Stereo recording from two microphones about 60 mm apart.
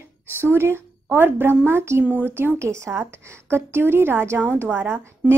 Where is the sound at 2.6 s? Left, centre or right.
Right.